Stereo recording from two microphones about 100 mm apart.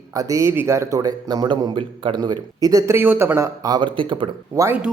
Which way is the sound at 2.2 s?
45° right (ahead or behind).